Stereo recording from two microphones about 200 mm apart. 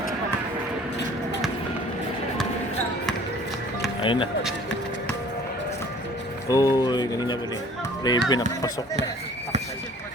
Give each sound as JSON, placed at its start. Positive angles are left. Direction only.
{"t": 4.0, "sound": "speech", "side_deg": 25}
{"t": 6.5, "sound": "speech", "side_deg": 15}